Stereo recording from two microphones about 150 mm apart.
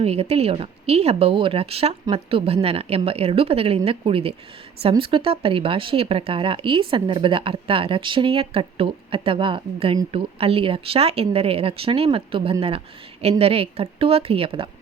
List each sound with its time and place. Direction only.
0.0 s speech: 40° right (ahead or behind)